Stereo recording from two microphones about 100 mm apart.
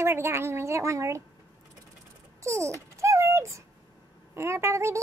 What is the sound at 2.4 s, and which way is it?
Babbling, 30° right (ahead or behind).